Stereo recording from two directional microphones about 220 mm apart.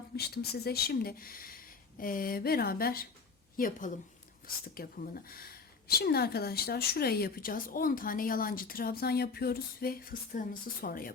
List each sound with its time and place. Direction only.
0.2 s speech: 45° left (ahead or behind)